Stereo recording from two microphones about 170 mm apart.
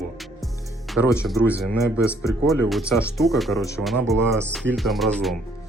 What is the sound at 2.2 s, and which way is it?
Speech, 20° left (ahead or behind).